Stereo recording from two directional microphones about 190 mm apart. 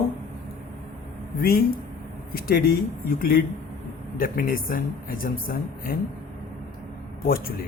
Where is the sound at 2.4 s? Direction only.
50° left (ahead or behind).